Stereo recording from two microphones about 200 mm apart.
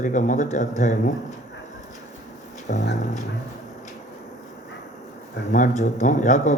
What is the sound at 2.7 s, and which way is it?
Speech, 40° left (ahead or behind).